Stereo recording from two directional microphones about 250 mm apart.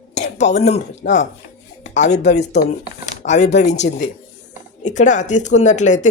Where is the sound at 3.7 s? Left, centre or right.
Left.